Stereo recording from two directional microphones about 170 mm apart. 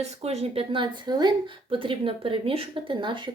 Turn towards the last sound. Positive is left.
turn(degrees=-30)  # may be behind; listen again after turning